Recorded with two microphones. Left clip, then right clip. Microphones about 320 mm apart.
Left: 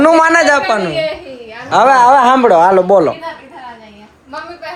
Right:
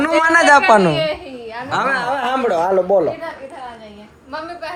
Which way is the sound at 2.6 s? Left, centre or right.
Left.